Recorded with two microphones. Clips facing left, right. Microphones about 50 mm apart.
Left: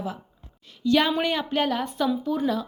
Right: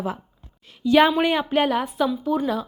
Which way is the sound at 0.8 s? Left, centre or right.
Right.